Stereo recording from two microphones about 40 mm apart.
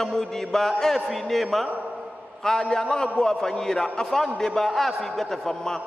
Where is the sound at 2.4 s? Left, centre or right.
Centre.